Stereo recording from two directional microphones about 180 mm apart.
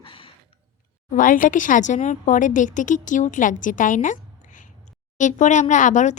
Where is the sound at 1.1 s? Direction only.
45° left (ahead or behind).